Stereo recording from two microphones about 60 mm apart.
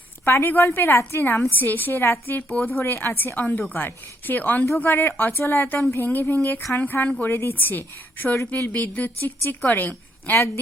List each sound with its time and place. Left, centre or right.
0.3 s a woman's voice: left